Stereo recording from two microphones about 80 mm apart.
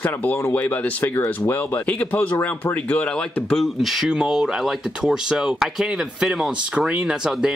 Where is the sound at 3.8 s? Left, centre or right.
Centre.